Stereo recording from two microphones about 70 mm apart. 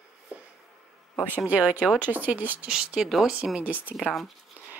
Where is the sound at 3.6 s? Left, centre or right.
Right.